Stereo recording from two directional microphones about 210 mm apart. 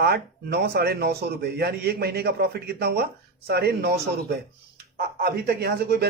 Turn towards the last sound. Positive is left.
turn(degrees=-50)  # may be behind; listen again after turning